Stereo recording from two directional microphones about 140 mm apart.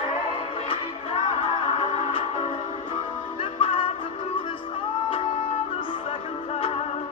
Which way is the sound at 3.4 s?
40° left (ahead or behind).